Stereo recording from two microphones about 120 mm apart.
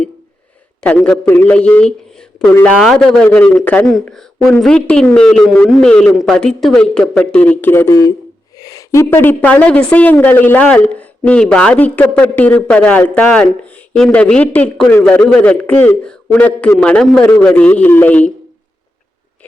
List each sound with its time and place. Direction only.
0.8 s a woman's voice: 10° left (ahead or behind)